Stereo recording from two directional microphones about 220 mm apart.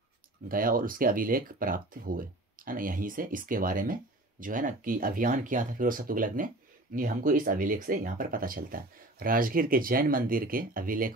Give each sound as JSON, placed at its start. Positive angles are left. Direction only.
{"t": 0.5, "sound": "speech", "side_deg": -40}